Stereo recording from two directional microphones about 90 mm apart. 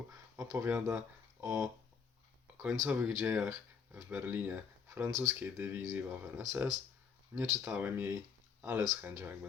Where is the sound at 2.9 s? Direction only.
20° right (ahead or behind).